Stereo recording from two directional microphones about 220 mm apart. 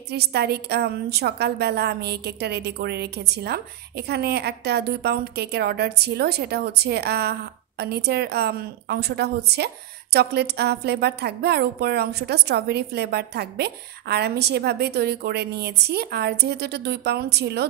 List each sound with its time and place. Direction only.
0.1 s a woman's voice: 45° right (ahead or behind)